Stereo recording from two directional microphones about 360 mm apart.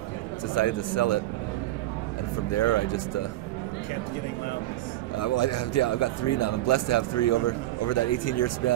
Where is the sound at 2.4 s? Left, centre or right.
Left.